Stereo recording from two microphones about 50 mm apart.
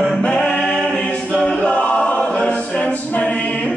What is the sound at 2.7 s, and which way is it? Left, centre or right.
A capella, left.